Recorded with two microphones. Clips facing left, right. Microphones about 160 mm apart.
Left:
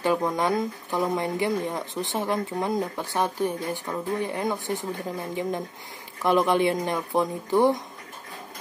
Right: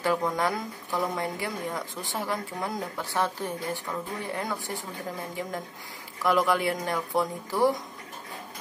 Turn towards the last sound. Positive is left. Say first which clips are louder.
# left 4 dB
turn(degrees=20)  # may be behind; listen again after turning